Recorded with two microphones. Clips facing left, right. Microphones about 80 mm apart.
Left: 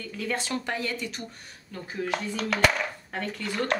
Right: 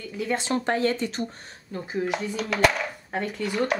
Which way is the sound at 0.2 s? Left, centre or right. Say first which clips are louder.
Right 5 dB; right.